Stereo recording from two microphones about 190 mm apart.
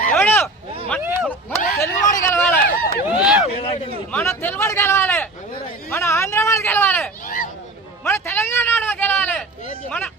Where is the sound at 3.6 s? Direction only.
35° left (ahead or behind).